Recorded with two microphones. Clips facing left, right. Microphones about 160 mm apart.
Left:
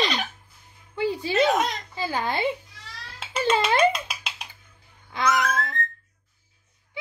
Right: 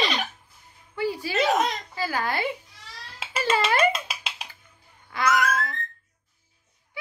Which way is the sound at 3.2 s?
5° right (ahead or behind).